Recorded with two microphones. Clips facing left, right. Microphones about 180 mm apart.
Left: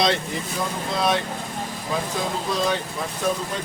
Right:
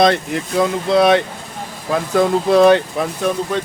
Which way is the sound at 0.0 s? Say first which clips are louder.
Right 8 dB; 65° right (ahead or behind).